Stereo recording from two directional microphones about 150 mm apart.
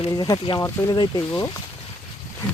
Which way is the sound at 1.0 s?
30° left (ahead or behind).